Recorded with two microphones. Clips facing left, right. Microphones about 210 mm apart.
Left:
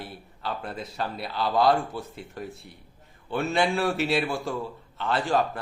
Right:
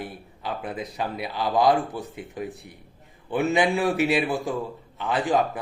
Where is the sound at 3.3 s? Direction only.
15° right (ahead or behind).